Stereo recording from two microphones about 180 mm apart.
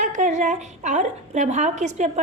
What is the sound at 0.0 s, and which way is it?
A woman's voice, 45° right (ahead or behind).